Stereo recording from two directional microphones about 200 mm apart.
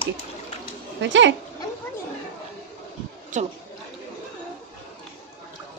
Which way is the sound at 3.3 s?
40° right (ahead or behind).